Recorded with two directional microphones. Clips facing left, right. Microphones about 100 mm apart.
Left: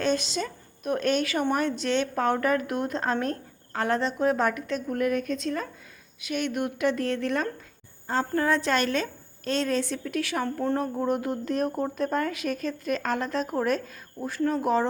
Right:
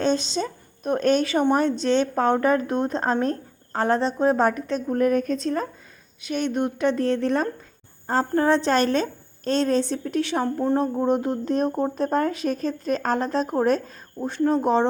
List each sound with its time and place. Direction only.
0.0 s speech: 30° right (ahead or behind)